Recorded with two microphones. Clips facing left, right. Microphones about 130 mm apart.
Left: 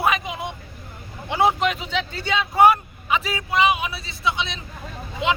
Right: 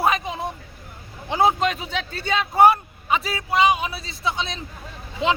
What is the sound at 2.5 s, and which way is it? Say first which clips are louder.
Speech: even; 30° right (ahead or behind).